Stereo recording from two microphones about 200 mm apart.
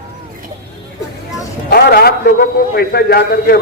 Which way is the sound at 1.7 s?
50° left (ahead or behind).